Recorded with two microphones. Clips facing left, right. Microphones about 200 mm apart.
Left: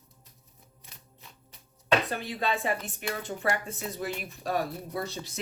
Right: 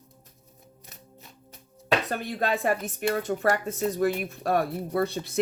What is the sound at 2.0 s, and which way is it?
Speech, 45° right (ahead or behind).